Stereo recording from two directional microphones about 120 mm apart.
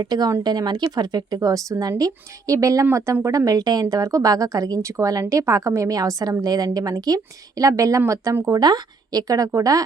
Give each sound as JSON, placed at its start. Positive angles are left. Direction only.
{"t": 0.0, "sound": "speech", "side_deg": -35}